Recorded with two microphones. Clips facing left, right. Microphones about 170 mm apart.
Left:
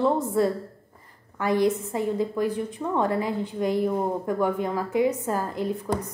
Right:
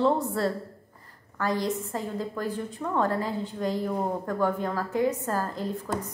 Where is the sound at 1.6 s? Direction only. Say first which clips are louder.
Left 6 dB; 15° left (ahead or behind).